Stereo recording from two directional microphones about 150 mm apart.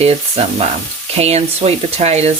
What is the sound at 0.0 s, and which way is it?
Speech, 45° right (ahead or behind).